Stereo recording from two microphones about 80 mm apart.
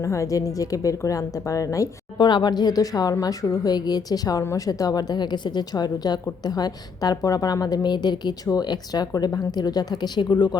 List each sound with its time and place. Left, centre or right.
0.0 s a woman's voice: left
2.1 s a woman's voice: left